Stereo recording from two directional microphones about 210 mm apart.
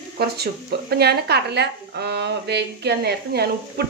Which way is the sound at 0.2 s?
50° right (ahead or behind).